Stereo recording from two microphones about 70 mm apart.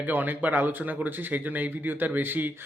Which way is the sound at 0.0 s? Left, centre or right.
Right.